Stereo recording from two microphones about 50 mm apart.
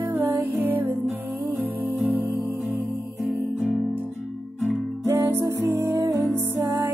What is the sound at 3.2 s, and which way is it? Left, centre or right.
Music, centre.